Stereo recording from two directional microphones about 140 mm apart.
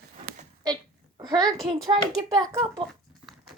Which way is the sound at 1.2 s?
30° right (ahead or behind).